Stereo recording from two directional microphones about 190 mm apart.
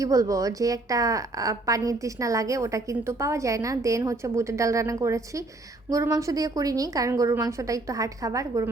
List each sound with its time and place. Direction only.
0.0 s a woman's voice: 15° right (ahead or behind)